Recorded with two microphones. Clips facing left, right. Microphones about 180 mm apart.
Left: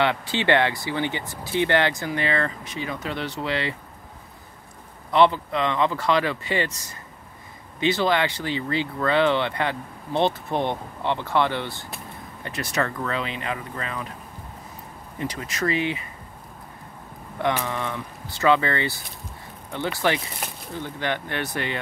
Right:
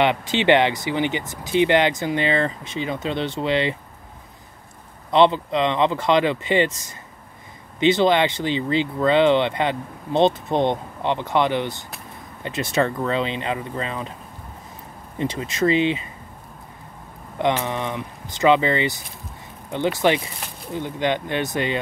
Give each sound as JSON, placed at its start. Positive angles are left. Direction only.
{"t": 0.0, "sound": "speech", "side_deg": -20}
{"t": 5.1, "sound": "speech", "side_deg": -20}
{"t": 15.1, "sound": "speech", "side_deg": -25}
{"t": 17.4, "sound": "speech", "side_deg": -20}
{"t": 20.0, "sound": "speech", "side_deg": -20}